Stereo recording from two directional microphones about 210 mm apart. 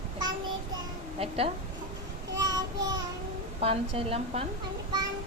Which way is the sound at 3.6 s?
30° right (ahead or behind).